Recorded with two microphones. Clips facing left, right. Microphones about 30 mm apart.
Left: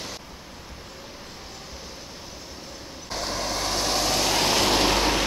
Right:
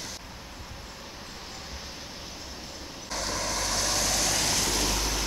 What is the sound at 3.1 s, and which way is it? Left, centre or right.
Vehicle, centre.